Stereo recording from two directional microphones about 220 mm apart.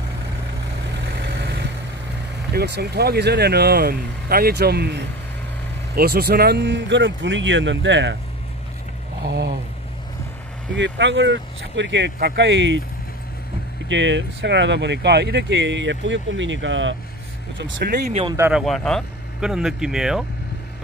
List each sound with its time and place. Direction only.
1.0 s vehicle: 50° right (ahead or behind)
2.5 s speech: 50° right (ahead or behind)
9.2 s speech: 45° right (ahead or behind)
10.7 s speech: 55° right (ahead or behind)
13.8 s speech: 55° right (ahead or behind)
18.3 s speech: 10° right (ahead or behind)
18.6 s speech: centre (ahead or behind)